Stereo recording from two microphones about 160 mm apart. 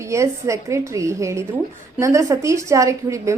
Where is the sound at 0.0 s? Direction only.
20° right (ahead or behind).